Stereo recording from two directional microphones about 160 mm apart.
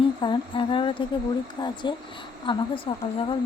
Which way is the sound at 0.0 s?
30° left (ahead or behind).